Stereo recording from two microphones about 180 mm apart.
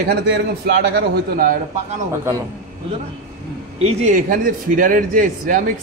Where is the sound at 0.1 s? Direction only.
60° right (ahead or behind).